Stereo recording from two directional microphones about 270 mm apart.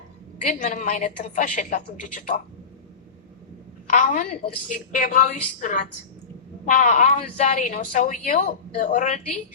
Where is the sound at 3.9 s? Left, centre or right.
Left.